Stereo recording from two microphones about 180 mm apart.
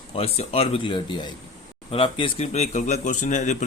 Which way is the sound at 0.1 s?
35° left (ahead or behind).